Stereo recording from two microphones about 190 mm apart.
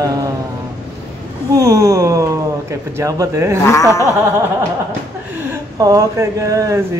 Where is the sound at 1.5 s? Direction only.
15° right (ahead or behind).